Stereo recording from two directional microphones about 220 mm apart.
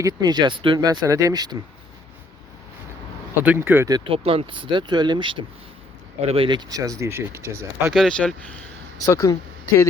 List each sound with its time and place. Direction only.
0.0 s speech: 20° right (ahead or behind)
3.4 s speech: 10° right (ahead or behind)
7.9 s speech: 5° left (ahead or behind)
9.0 s speech: 15° left (ahead or behind)